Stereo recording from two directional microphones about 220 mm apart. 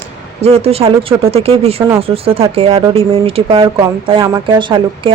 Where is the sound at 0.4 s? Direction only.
25° right (ahead or behind).